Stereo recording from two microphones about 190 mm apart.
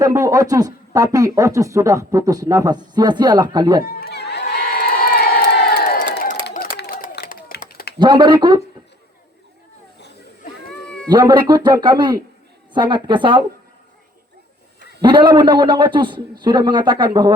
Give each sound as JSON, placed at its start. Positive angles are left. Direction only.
{"t": 0.0, "sound": "speech", "side_deg": -20}
{"t": 3.8, "sound": "crowd", "side_deg": 50}
{"t": 6.5, "sound": "dog", "side_deg": 55}
{"t": 7.9, "sound": "speech", "side_deg": -25}
{"t": 10.7, "sound": "cat", "side_deg": 5}
{"t": 11.1, "sound": "speech", "side_deg": -25}
{"t": 15.0, "sound": "speech", "side_deg": -25}